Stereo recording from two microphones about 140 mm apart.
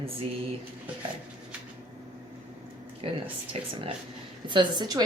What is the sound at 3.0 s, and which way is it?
Speech, 40° right (ahead or behind).